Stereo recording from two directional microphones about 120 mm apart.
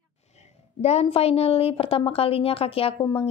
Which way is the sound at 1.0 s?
55° left (ahead or behind).